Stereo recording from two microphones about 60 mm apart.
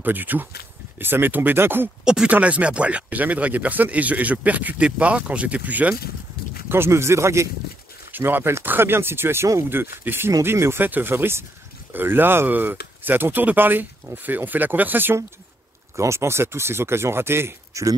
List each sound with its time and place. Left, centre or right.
0.0 s speech: right
2.0 s speech: centre
2.3 s speech: right
6.7 s speech: right
8.2 s speech: right
10.8 s speech: right
16.0 s speech: right